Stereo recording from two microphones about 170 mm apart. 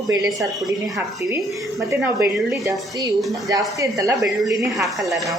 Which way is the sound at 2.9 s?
20° right (ahead or behind).